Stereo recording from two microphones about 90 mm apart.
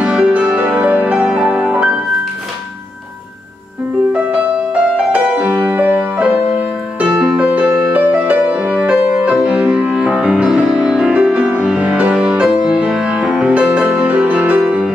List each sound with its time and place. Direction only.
0.0 s music: 15° right (ahead or behind)
4.1 s music: 10° right (ahead or behind)